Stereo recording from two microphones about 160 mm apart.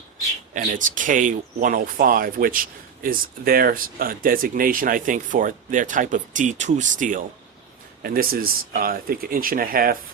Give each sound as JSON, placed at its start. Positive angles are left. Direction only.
{"t": 0.5, "sound": "speech", "side_deg": -55}
{"t": 8.0, "sound": "speech", "side_deg": -65}